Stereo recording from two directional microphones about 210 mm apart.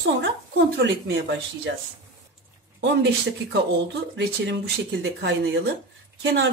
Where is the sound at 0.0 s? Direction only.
55° right (ahead or behind).